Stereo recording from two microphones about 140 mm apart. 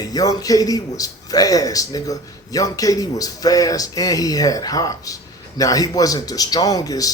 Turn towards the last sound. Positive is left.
turn(degrees=25)  # may be behind; listen again after turning